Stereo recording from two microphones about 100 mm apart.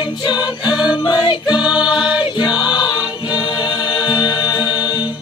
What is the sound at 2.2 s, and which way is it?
Choir, 50° left (ahead or behind).